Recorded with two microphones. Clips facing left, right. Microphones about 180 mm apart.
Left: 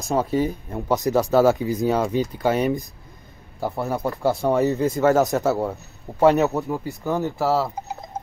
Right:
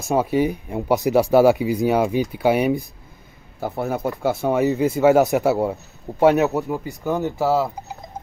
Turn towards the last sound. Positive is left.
turn(degrees=0)  # may be behind; listen again after turning